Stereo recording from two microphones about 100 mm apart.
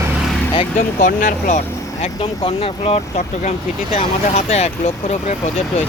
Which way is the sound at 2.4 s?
65° left (ahead or behind).